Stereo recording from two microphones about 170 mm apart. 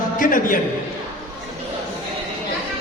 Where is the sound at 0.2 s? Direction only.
55° left (ahead or behind).